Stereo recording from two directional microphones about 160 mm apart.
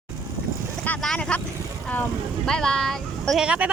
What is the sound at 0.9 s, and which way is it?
Vehicle, 5° left (ahead or behind).